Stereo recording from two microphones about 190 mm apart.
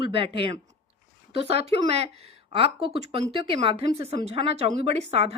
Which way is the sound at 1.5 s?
30° right (ahead or behind).